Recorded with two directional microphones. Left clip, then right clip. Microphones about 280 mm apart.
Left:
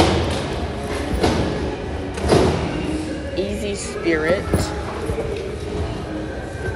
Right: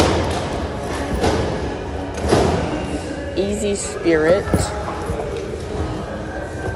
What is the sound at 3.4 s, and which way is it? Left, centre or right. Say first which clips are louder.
Music: right 5 dB; centre.